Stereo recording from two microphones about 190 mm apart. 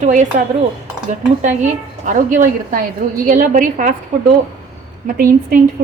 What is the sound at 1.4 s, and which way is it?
A woman's voice, 40° right (ahead or behind).